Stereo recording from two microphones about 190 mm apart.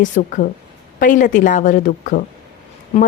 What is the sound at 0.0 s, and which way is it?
Speech, 45° left (ahead or behind).